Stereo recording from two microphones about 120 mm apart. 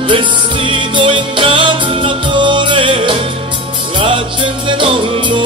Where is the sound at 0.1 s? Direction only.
45° right (ahead or behind).